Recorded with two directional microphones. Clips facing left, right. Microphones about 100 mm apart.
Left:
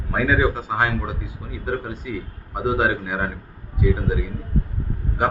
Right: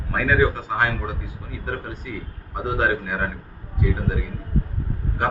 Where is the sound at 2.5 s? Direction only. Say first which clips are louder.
Left 2 dB; 15° left (ahead or behind).